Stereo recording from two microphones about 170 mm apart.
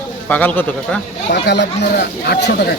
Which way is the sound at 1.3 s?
90° left.